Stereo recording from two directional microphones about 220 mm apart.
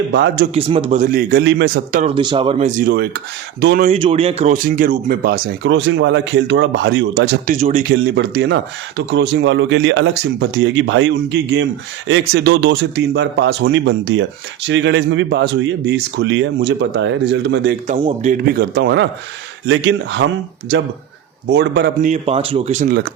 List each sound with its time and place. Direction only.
0.1 s speech: 50° right (ahead or behind)
0.5 s a man's voice: 25° right (ahead or behind)
2.1 s speech: 25° right (ahead or behind); by 3.1 s 40° right (ahead or behind)
3.8 s speech: 30° right (ahead or behind); by 7.3 s 55° right (ahead or behind)
7.4 s speech: 35° right (ahead or behind); by 17.7 s 50° right (ahead or behind)
17.8 s a man's voice: 30° right (ahead or behind)
18.4 s speech: 45° right (ahead or behind)
21.5 s speech: 50° right (ahead or behind)
22.0 s a man's voice: 30° right (ahead or behind); by 23.1 s 45° right (ahead or behind)